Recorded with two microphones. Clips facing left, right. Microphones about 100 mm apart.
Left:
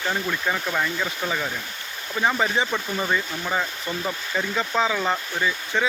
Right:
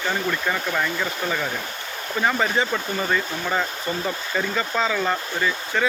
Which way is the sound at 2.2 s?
15° left (ahead or behind).